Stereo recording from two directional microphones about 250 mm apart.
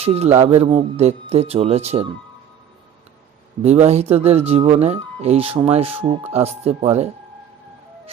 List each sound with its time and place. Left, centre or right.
0.0 s speech: right
3.6 s speech: right